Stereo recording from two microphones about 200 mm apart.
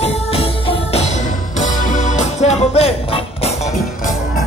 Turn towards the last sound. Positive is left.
turn(degrees=30)  # may be behind; listen again after turning